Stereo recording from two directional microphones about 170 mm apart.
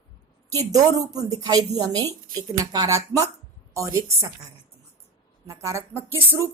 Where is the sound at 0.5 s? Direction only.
20° right (ahead or behind).